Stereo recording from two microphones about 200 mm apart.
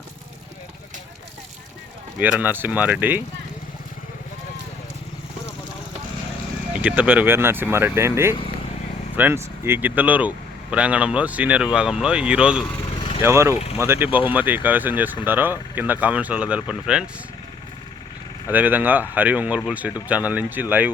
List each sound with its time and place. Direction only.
2.1 s speech: 10° right (ahead or behind)
6.8 s speech: 10° right (ahead or behind)
12.6 s vehicle: 25° left (ahead or behind)
13.2 s speech: 15° right (ahead or behind)
18.5 s speech: 10° right (ahead or behind)